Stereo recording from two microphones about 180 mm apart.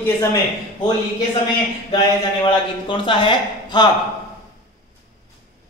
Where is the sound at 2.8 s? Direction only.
25° left (ahead or behind).